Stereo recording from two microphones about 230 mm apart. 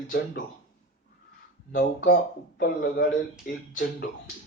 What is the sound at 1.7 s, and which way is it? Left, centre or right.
Speech, left.